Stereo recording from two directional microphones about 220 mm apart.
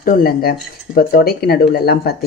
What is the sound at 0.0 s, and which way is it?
Speech, 40° left (ahead or behind).